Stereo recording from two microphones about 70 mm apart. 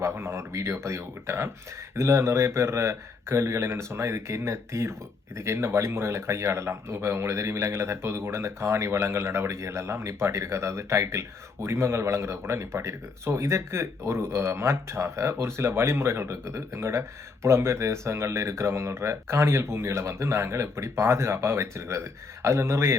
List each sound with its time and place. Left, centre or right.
0.0 s speech: right